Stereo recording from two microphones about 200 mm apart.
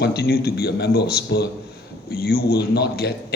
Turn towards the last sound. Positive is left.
turn(degrees=55)  # may be behind; listen again after turning